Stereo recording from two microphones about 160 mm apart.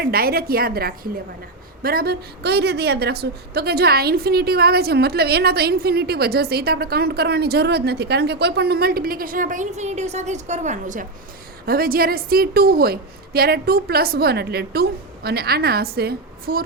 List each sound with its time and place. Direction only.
0.0 s a woman's voice: 70° right (ahead or behind); by 11.0 s 50° right (ahead or behind)
11.6 s a woman's voice: 70° right (ahead or behind)